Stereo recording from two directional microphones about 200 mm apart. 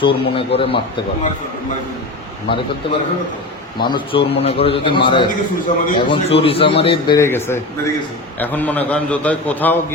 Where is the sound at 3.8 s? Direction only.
25° left (ahead or behind).